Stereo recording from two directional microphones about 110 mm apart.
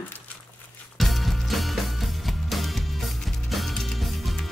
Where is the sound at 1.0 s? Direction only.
Centre (ahead or behind).